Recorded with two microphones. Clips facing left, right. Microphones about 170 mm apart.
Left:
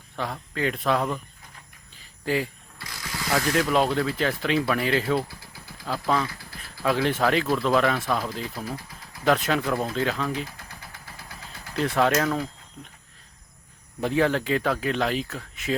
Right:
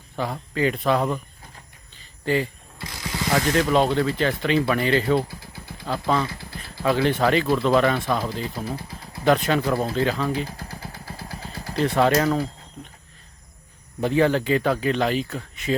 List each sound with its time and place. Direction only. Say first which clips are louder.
0.2 s speech: right 4 dB; centre (ahead or behind)
2.2 s speech: right 3 dB; centre (ahead or behind)
2.7 s vehicle: right 6 dB; 25° right (ahead or behind)
3.5 s speech: right 2 dB; centre (ahead or behind)
8.5 s speech: right 3 dB; 30° right (ahead or behind)
9.2 s speech: right 3 dB; centre (ahead or behind)
10.4 s vehicle: right 6 dB; 35° right (ahead or behind)
11.9 s speech: right 3 dB; centre (ahead or behind)
14.0 s speech: right 3 dB; centre (ahead or behind)